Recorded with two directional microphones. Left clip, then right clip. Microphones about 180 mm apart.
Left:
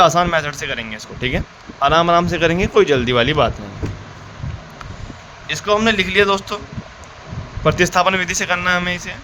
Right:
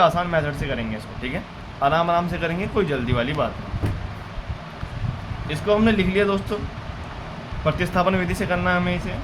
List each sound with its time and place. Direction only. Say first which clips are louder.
0.0 s a man's voice: left 5 dB; 65° left (ahead or behind)
5.5 s speech: left 4 dB; 65° left (ahead or behind)
7.6 s a man's voice: left 7 dB; 70° left (ahead or behind)